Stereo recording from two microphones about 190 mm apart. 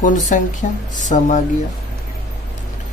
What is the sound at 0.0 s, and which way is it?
Speech, 40° left (ahead or behind).